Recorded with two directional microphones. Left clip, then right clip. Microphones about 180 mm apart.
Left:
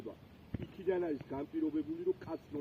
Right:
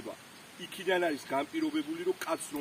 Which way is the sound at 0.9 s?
50° right (ahead or behind).